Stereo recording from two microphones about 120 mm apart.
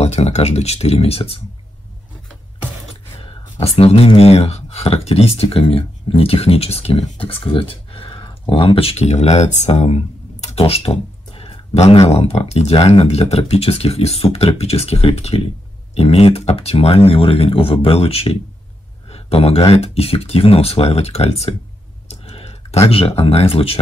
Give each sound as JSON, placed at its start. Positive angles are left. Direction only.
{"t": 0.0, "sound": "speech", "side_deg": 65}
{"t": 3.2, "sound": "speech", "side_deg": 55}
{"t": 22.0, "sound": "typing", "side_deg": 60}
{"t": 22.8, "sound": "speech", "side_deg": 50}